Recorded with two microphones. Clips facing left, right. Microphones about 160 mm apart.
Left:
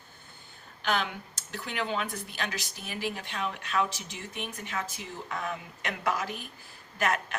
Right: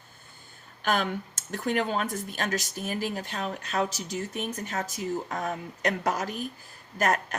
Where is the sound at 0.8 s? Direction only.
45° right (ahead or behind).